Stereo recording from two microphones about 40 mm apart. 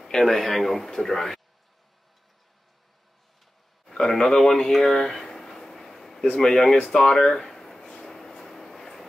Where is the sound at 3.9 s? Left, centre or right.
Centre.